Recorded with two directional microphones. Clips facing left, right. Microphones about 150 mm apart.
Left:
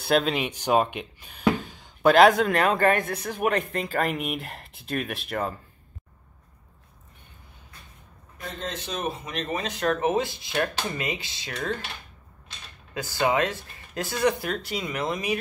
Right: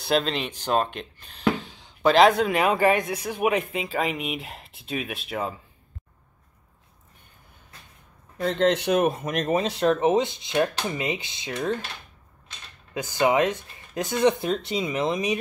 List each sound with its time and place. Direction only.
0.0 s a man's voice: 5° left (ahead or behind)
8.4 s speech: 70° right (ahead or behind); by 9.8 s 35° right (ahead or behind)
9.9 s speech: 20° right (ahead or behind)
12.9 s speech: 20° right (ahead or behind)